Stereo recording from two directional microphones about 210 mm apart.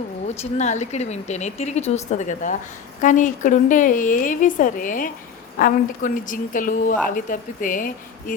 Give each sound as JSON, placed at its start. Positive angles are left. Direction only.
{"t": 0.6, "sound": "a woman's voice", "side_deg": 35}